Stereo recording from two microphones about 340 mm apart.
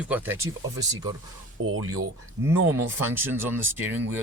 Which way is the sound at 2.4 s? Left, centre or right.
Centre.